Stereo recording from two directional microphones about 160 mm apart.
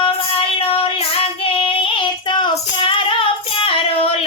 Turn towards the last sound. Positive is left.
turn(degrees=35)  # may be behind; listen again after turning